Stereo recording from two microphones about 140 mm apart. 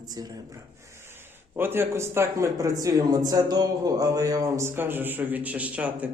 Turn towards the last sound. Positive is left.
turn(degrees=-10)  # may be behind; listen again after turning